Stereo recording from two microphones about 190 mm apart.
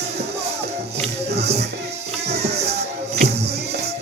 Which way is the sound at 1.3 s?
60° right (ahead or behind).